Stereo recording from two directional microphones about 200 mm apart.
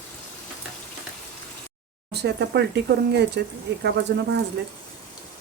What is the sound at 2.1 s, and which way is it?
Speech, 55° right (ahead or behind).